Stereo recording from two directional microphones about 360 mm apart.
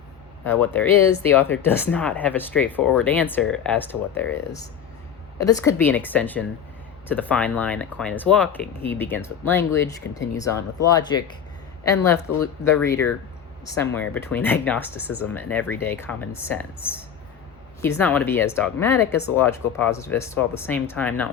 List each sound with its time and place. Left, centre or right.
0.4 s speech: centre
5.4 s speech: centre
17.8 s speech: centre